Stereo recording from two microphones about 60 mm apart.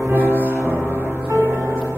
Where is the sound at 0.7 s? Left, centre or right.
Right.